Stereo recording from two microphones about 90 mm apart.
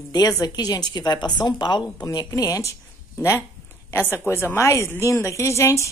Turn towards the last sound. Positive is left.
turn(degrees=30)  # may be behind; listen again after turning